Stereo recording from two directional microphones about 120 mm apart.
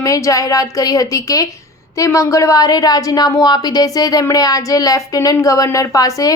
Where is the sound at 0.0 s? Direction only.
30° left (ahead or behind).